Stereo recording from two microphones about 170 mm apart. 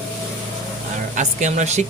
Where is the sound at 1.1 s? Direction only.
45° right (ahead or behind).